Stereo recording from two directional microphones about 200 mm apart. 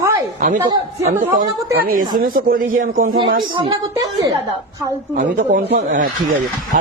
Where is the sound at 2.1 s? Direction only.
45° right (ahead or behind).